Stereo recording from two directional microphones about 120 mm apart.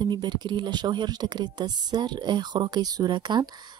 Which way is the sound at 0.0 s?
40° right (ahead or behind).